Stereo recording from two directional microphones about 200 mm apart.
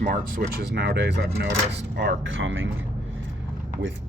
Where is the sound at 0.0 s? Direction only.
45° right (ahead or behind); by 2.8 s 75° right (ahead or behind).